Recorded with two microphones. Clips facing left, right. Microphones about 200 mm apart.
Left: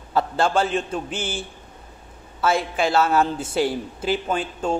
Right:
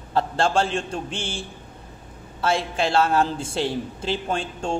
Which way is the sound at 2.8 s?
30° right (ahead or behind).